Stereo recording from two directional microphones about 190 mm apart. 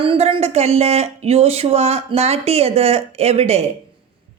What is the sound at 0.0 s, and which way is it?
Speech, 30° right (ahead or behind).